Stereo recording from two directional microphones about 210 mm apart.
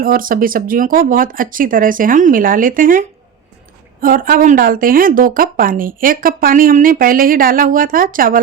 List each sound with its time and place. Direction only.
0.0 s a woman's voice: 40° right (ahead or behind)
4.0 s a woman's voice: 40° right (ahead or behind)